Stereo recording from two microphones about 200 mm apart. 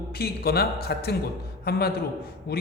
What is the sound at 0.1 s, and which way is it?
A man's voice, 50° left (ahead or behind).